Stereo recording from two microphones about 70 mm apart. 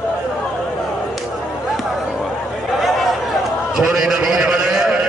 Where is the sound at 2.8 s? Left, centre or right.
Centre.